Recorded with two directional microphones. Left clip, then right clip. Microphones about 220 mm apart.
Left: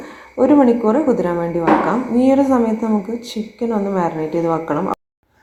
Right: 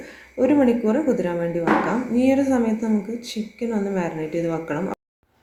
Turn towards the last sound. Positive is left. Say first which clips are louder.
# left 7 dB
turn(degrees=0)  # may be behind; listen again after turning